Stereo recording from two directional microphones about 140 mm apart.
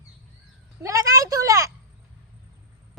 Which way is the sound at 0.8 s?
20° right (ahead or behind).